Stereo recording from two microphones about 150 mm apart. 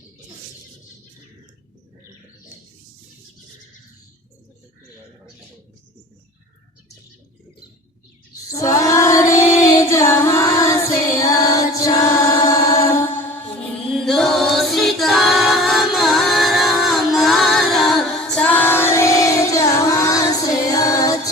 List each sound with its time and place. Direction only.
8.4 s female singing: 20° left (ahead or behind)
11.2 s singing: 25° left (ahead or behind)
13.9 s a capella: centre (ahead or behind); by 21.2 s 25° left (ahead or behind)